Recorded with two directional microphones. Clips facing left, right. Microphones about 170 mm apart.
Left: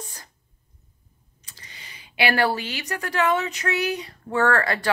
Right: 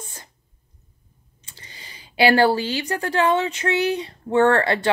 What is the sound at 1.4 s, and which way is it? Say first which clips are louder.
Speech: right 2 dB; 30° right (ahead or behind).